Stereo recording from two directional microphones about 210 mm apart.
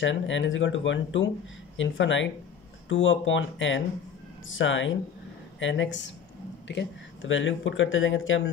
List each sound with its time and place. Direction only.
0.0 s speech: 60° left (ahead or behind)